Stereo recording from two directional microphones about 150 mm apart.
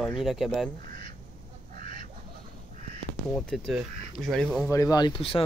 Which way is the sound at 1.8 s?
65° right (ahead or behind).